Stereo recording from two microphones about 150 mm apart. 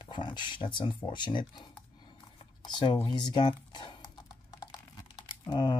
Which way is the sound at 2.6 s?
30° left (ahead or behind).